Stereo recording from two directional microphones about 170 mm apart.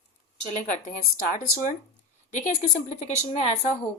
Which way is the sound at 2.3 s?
45° left (ahead or behind).